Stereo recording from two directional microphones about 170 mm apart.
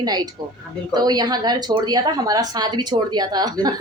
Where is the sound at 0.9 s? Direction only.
25° right (ahead or behind).